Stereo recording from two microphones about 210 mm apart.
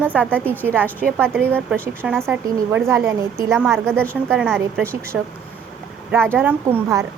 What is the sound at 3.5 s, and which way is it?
Speech, centre (ahead or behind).